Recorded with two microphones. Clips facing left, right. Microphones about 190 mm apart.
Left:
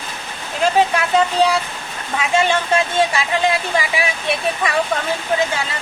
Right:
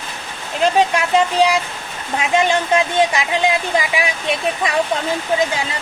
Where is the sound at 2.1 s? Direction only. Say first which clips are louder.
Right 1 dB; 20° right (ahead or behind).